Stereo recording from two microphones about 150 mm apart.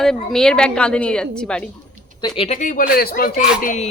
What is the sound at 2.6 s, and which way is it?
Speech, 75° left (ahead or behind).